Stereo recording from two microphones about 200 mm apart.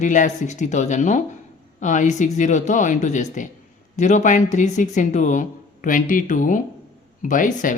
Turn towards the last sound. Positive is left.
turn(degrees=40)  # may be behind; listen again after turning